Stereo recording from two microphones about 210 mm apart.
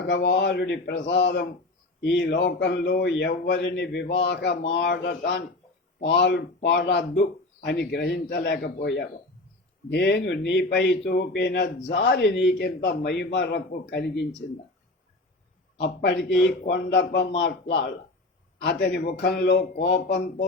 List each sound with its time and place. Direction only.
0.1 s speech: 55° left (ahead or behind)
15.8 s speech: 55° left (ahead or behind)